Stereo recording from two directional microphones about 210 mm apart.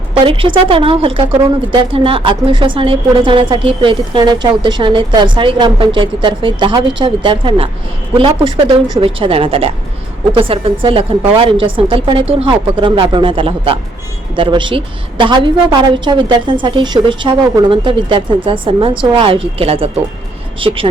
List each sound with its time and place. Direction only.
0.1 s a woman's voice: 25° right (ahead or behind)